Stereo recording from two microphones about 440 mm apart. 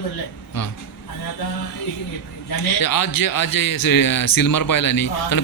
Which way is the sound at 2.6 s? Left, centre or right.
Left.